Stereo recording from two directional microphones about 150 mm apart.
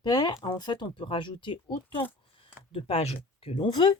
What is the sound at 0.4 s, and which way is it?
Speech, 25° left (ahead or behind).